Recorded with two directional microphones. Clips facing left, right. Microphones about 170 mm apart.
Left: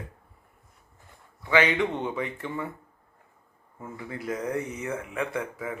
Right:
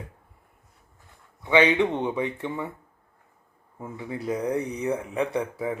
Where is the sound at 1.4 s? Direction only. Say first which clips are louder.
Right 3 dB; 25° right (ahead or behind).